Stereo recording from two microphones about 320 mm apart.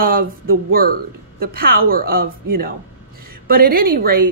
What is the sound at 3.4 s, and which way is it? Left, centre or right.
Speech, right.